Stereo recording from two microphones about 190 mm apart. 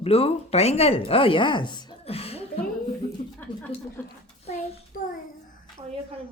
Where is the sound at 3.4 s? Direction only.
10° left (ahead or behind).